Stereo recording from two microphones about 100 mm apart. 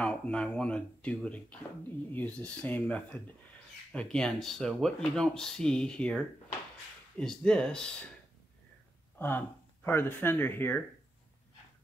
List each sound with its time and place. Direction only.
0.0 s speech: 10° left (ahead or behind)
9.2 s speech: 20° left (ahead or behind)